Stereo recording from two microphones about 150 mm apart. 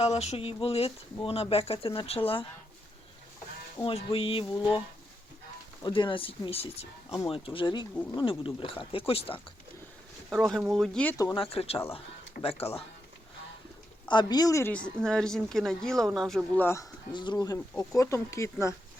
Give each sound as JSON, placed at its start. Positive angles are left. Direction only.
{"t": 0.0, "sound": "speech", "side_deg": 45}
{"t": 3.8, "sound": "speech", "side_deg": 35}
{"t": 5.8, "sound": "speech", "side_deg": 35}
{"t": 10.2, "sound": "speech", "side_deg": -10}
{"t": 10.7, "sound": "speech", "side_deg": 0}
{"t": 11.3, "sound": "speech", "side_deg": 40}
{"t": 14.1, "sound": "speech", "side_deg": 30}
{"t": 15.0, "sound": "speech", "side_deg": 5}
{"t": 17.1, "sound": "speech", "side_deg": 30}
{"t": 17.9, "sound": "speech", "side_deg": 20}